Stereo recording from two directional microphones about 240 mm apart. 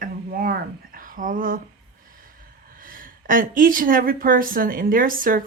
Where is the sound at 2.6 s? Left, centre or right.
Right.